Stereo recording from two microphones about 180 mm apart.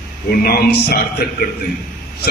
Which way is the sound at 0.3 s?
55° left (ahead or behind).